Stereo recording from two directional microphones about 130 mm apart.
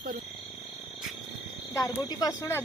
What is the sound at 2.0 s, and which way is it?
Speech, 30° left (ahead or behind).